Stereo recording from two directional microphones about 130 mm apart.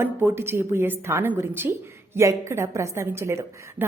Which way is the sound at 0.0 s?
15° right (ahead or behind).